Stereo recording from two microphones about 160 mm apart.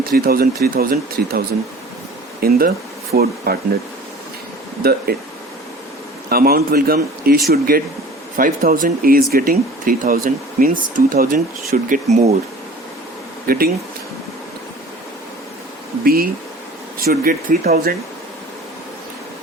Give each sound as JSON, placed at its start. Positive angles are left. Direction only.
{"t": 0.0, "sound": "speech", "side_deg": -70}
{"t": 2.4, "sound": "speech", "side_deg": -70}
{"t": 4.8, "sound": "speech", "side_deg": -75}
{"t": 6.2, "sound": "speech", "side_deg": -70}
{"t": 8.4, "sound": "speech", "side_deg": -60}
{"t": 13.5, "sound": "speech", "side_deg": -65}
{"t": 16.0, "sound": "speech", "side_deg": -70}